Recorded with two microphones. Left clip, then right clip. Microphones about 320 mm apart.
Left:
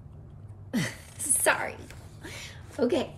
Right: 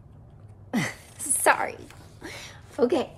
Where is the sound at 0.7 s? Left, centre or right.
Centre.